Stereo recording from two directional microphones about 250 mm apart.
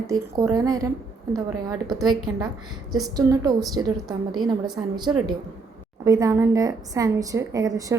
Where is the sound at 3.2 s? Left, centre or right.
Centre.